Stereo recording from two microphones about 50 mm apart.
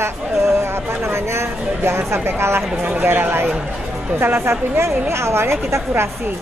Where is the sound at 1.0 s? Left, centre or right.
Right.